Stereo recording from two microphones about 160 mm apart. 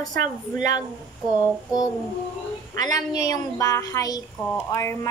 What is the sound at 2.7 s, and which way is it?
A woman's voice, 20° left (ahead or behind).